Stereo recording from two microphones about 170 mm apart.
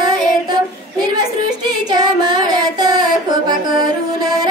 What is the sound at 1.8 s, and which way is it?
Music, 25° right (ahead or behind).